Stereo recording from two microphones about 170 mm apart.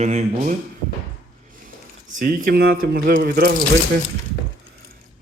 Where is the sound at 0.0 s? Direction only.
40° right (ahead or behind).